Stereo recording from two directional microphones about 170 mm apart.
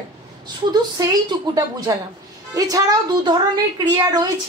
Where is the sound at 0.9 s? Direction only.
20° right (ahead or behind).